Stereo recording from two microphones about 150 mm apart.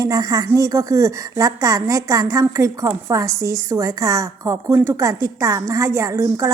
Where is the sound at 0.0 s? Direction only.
25° right (ahead or behind).